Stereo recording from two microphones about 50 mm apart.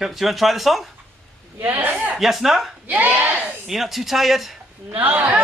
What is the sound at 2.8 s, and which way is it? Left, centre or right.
Speech, right.